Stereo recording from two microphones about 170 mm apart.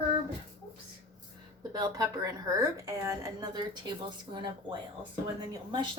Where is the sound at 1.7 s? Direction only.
20° right (ahead or behind).